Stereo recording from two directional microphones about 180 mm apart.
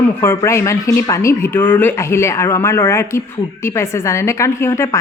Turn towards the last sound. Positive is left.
turn(degrees=15)  # may be behind; listen again after turning